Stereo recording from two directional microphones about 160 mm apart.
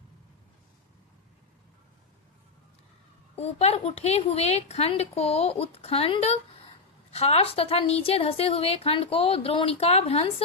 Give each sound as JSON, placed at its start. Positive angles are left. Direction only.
{"t": 3.3, "sound": "a woman's voice", "side_deg": 40}